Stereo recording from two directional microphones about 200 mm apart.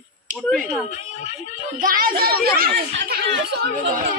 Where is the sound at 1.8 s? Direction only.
45° right (ahead or behind).